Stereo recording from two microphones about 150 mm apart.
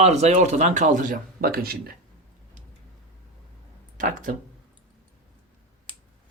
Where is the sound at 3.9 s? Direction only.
65° right (ahead or behind).